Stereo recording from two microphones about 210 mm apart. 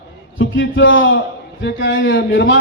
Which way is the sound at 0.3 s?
65° left (ahead or behind).